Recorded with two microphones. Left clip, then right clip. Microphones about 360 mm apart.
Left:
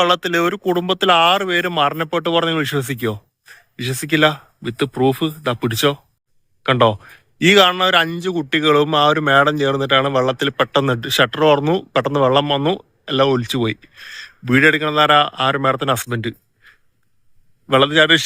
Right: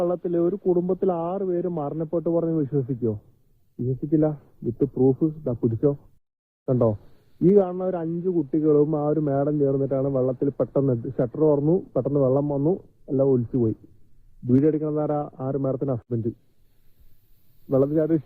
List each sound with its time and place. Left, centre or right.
0.0 s speech: left
4.9 s speech: left
17.7 s speech: left